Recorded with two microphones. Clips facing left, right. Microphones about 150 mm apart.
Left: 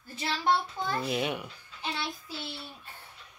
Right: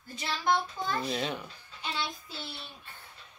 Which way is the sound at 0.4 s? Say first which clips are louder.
Left 1 dB; 30° left (ahead or behind).